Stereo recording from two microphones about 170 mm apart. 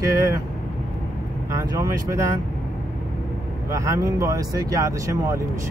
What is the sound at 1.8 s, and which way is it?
Speech, 15° right (ahead or behind).